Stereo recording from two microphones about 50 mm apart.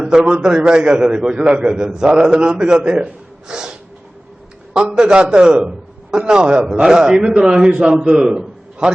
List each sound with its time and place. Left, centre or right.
0.0 s a man's voice: centre
4.9 s a man's voice: centre